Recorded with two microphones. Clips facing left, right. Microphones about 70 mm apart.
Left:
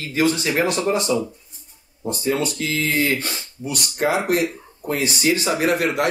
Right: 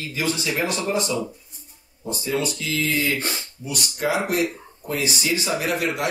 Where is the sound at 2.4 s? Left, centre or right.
Left.